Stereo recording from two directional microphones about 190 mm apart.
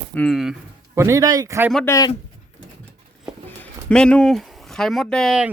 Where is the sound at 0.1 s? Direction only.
5° left (ahead or behind).